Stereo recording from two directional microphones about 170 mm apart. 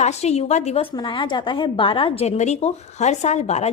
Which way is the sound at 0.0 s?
40° left (ahead or behind).